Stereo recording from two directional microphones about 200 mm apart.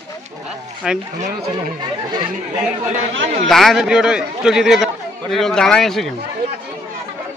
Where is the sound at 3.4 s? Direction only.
Centre (ahead or behind).